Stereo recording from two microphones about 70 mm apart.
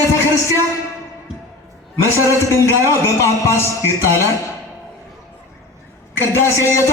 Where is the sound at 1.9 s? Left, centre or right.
Left.